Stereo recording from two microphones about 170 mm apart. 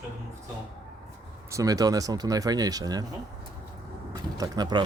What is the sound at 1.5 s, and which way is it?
Speech, 20° right (ahead or behind).